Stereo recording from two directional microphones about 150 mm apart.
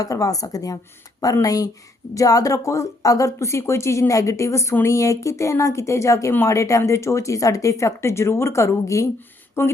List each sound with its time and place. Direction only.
0.0 s speech: 25° left (ahead or behind)